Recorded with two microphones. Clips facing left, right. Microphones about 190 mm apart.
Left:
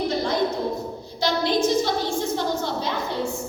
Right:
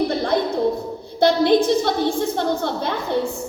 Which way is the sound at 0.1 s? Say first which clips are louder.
Right 3 dB; 55° right (ahead or behind).